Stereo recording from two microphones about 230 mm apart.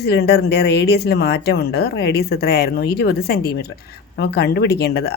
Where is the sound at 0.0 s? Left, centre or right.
Left.